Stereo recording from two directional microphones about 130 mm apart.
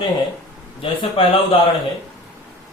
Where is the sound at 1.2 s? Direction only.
45° left (ahead or behind).